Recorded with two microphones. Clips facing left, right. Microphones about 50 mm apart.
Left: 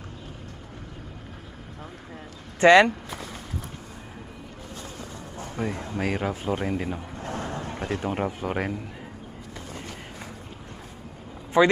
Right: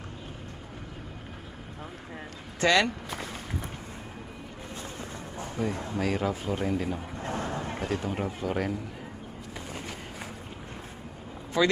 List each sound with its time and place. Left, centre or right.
2.6 s speech: left
5.5 s speech: centre
6.0 s speech: left
7.2 s a sound: centre
8.0 s speech: left
9.7 s run: centre
11.6 s speech: left